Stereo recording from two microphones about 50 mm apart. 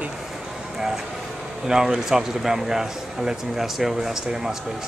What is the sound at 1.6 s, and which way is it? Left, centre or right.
Speech, centre.